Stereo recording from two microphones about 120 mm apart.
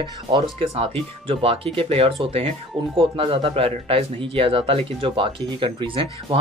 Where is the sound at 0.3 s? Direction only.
55° right (ahead or behind).